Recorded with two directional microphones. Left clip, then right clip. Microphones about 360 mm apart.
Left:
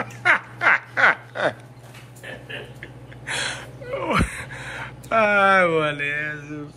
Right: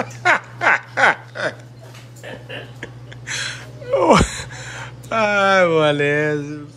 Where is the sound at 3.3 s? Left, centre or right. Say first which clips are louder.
Right 1 dB; centre.